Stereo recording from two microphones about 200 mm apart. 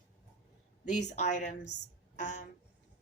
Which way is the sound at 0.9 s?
40° left (ahead or behind).